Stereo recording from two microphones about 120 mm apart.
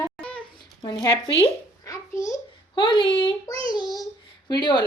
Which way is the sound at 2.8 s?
45° left (ahead or behind).